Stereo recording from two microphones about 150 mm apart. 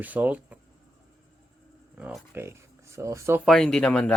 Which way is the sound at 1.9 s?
10° right (ahead or behind).